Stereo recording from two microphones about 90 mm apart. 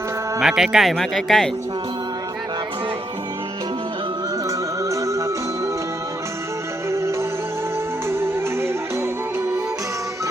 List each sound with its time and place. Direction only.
0.3 s speech: 5° right (ahead or behind)
4.4 s music: 35° right (ahead or behind)
6.9 s music: 30° right (ahead or behind)